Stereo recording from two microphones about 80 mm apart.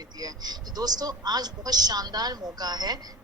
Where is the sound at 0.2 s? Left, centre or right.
Right.